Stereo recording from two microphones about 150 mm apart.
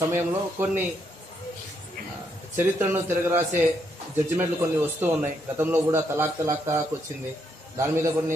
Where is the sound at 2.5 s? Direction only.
15° right (ahead or behind).